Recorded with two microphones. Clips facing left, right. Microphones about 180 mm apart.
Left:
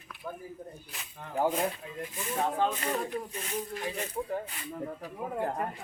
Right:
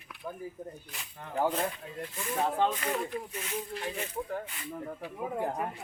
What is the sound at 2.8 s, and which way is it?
Speech, 35° left (ahead or behind).